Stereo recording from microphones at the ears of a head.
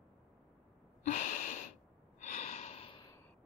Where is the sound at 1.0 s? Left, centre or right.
Left.